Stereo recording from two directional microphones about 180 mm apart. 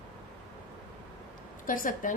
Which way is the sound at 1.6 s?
50° left (ahead or behind).